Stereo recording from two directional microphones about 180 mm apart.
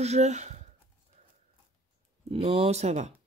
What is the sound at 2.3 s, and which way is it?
Speech, 35° right (ahead or behind).